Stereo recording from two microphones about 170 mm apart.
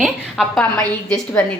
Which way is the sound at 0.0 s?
Centre (ahead or behind).